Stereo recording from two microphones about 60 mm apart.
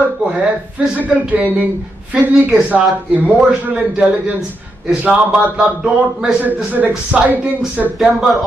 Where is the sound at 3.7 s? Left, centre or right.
Centre.